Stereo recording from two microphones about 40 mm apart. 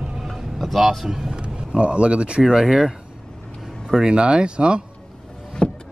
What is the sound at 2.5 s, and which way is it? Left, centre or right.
Speech, centre.